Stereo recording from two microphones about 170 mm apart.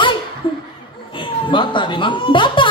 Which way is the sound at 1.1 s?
30° left (ahead or behind).